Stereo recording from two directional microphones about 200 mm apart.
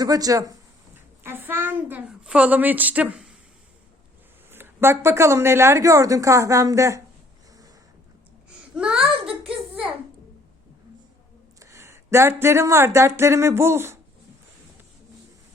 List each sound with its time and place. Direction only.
0.0 s speech: 20° right (ahead or behind)
4.5 s speech: 10° right (ahead or behind)
8.4 s babbling: 5° right (ahead or behind)
9.2 s a child's voice: 5° right (ahead or behind)
11.6 s speech: 15° right (ahead or behind)